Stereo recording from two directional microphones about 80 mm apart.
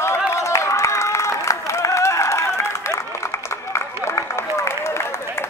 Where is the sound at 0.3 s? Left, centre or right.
Left.